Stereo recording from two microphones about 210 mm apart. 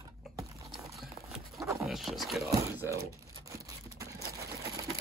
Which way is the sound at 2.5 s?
15° right (ahead or behind).